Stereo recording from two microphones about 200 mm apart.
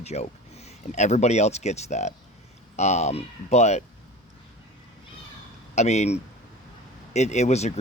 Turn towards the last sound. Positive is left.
turn(degrees=35)  # may be behind; listen again after turning